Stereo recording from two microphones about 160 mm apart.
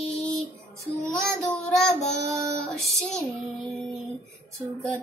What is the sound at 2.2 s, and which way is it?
Child singing, 20° right (ahead or behind).